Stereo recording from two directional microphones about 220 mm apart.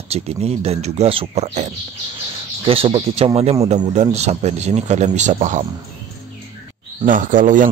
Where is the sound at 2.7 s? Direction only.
25° right (ahead or behind).